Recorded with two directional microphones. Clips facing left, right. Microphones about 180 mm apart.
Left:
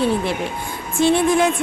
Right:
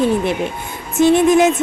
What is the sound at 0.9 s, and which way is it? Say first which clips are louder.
Speech: right 5 dB; 20° right (ahead or behind).